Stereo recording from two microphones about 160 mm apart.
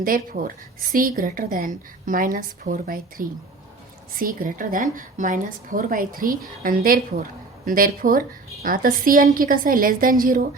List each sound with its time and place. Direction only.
0.0 s a woman's voice: 60° right (ahead or behind)